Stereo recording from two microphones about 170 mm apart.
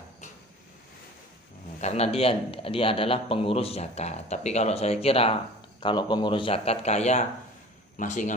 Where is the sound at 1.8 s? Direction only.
40° left (ahead or behind).